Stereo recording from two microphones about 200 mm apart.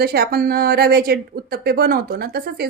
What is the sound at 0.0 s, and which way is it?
Speech, 50° right (ahead or behind).